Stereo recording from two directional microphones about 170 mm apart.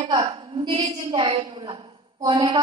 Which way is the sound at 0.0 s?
30° right (ahead or behind).